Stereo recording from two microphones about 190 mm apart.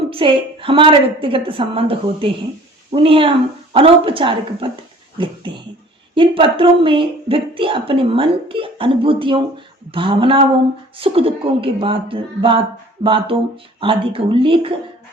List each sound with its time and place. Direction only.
0.1 s a woman's voice: 30° right (ahead or behind)